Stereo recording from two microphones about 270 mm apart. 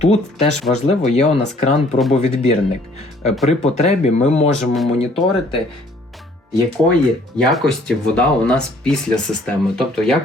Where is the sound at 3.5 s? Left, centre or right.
Left.